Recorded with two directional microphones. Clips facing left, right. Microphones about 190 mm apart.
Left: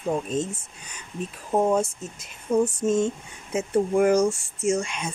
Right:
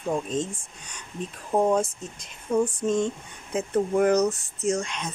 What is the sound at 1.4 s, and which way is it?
Speech, 5° left (ahead or behind).